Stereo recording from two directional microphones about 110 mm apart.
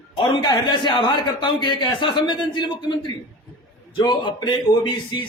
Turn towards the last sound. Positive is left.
turn(degrees=45)  # may be behind; listen again after turning